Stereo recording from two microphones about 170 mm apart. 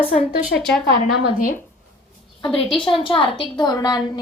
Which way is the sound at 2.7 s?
30° left (ahead or behind).